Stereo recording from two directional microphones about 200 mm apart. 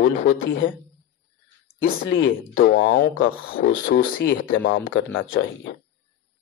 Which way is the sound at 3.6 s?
55° left (ahead or behind).